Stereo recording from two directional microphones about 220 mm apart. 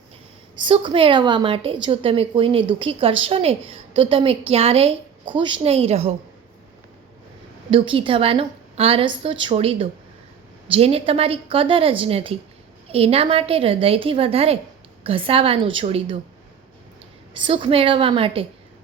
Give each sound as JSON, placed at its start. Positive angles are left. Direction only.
{"t": 0.5, "sound": "a woman's voice", "side_deg": -20}
{"t": 7.7, "sound": "a woman's voice", "side_deg": -25}
{"t": 17.3, "sound": "a woman's voice", "side_deg": -25}